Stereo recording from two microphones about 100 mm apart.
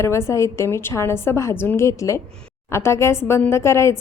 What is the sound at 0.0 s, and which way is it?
A woman's voice, 30° left (ahead or behind).